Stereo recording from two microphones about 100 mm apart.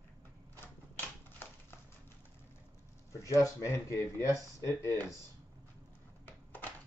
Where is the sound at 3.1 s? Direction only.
30° left (ahead or behind).